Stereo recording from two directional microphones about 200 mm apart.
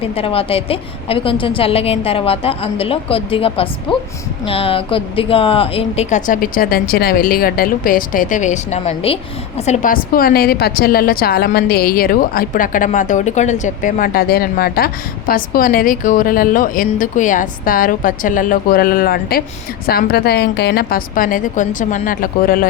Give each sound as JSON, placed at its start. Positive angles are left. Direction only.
{"t": 0.0, "sound": "a woman's voice", "side_deg": 30}